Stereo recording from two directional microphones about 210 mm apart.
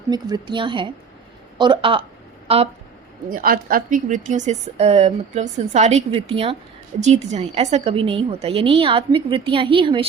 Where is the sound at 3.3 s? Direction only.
40° right (ahead or behind).